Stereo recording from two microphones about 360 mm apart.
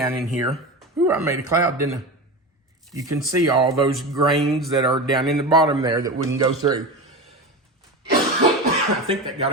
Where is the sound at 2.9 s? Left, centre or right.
Centre.